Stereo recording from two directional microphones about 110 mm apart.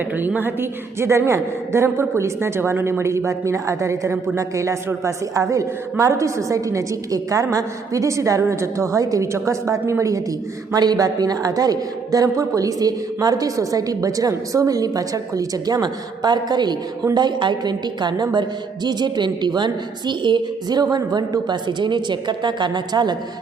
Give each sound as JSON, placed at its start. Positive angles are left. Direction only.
{"t": 0.2, "sound": "a woman's voice", "side_deg": -15}